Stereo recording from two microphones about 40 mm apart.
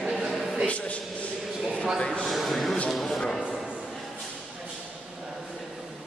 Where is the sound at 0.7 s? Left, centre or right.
Left.